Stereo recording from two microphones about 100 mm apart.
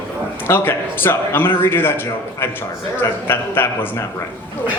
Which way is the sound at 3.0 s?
20° left (ahead or behind).